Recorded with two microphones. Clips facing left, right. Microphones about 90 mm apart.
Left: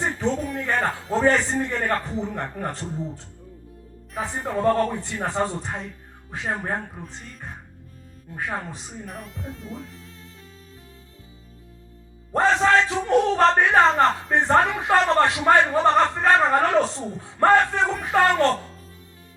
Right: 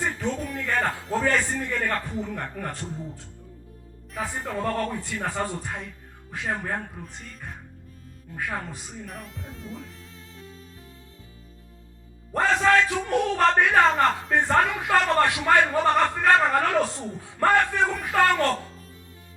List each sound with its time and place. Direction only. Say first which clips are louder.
0.0 s a sound: left 3 dB; 25° left (ahead or behind)
0.7 s music: left 1 dB; 30° left (ahead or behind)
1.2 s a man's voice: left 5 dB; 25° left (ahead or behind)
4.6 s a man's voice: left 8 dB; 30° left (ahead or behind)
8.4 s a man's voice: left 2 dB; 30° left (ahead or behind)
9.0 s speech: left 3 dB; centre (ahead or behind)
12.3 s a man's voice: left 2 dB; 30° left (ahead or behind)